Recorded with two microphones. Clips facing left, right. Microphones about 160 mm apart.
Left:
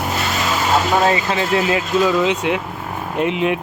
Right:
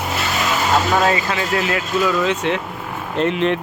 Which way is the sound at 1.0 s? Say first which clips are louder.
Left 1 dB; 25° left (ahead or behind).